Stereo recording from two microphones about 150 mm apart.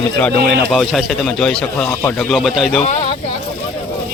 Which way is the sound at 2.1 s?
Centre (ahead or behind).